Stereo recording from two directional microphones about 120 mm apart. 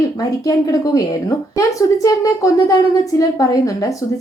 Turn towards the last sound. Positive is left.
turn(degrees=30)  # may be behind; listen again after turning